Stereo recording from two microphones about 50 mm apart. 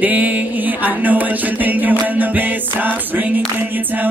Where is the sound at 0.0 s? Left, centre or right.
Right.